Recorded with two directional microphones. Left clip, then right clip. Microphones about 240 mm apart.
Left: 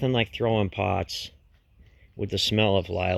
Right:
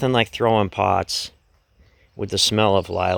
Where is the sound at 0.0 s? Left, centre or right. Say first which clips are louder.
Right 6 dB; centre.